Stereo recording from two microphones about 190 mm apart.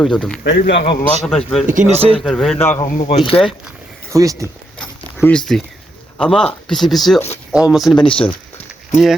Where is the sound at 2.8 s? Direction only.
40° left (ahead or behind).